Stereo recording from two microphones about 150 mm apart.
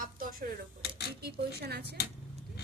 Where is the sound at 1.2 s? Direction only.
90° right.